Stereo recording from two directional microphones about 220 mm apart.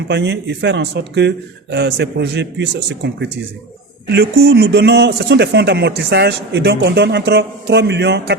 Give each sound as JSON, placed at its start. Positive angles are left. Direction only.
{"t": 0.1, "sound": "speech", "side_deg": -50}